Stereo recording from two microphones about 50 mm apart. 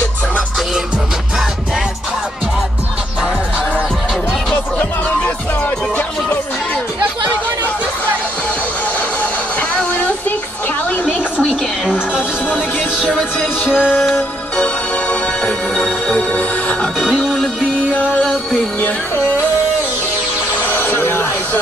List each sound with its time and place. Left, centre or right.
9.2 s music: left
13.7 s music: centre
14.6 s music: left
20.6 s a sound: left